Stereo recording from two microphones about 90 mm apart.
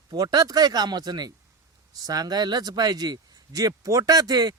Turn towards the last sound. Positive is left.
turn(degrees=-45)  # may be behind; listen again after turning